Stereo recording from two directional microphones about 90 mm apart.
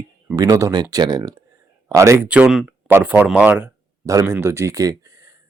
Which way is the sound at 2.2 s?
15° right (ahead or behind).